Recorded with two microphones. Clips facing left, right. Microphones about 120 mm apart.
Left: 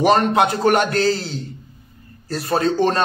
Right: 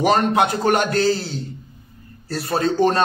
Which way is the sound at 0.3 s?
30° left (ahead or behind).